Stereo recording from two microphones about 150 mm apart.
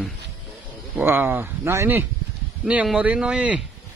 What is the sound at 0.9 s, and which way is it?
Speech, 15° right (ahead or behind).